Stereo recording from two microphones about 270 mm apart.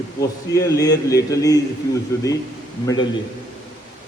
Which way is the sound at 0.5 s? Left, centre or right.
Centre.